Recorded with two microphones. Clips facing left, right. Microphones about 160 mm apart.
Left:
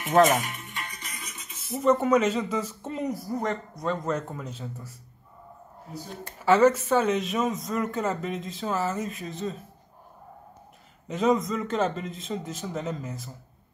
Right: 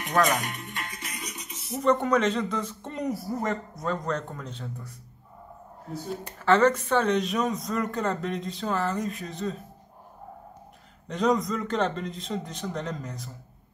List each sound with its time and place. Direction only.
0.3 s music: centre (ahead or behind)
1.1 s music: 15° right (ahead or behind)
1.7 s speech: 5° left (ahead or behind)
6.4 s speech: 5° left (ahead or behind)
11.1 s speech: 5° left (ahead or behind)